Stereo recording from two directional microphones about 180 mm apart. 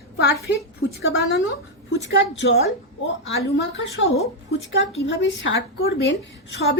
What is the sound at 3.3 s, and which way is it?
A woman's voice, 90° left.